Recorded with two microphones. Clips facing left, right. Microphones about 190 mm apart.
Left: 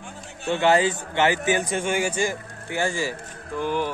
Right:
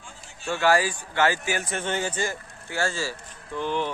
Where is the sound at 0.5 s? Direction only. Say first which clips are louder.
Left 3 dB; 20° left (ahead or behind).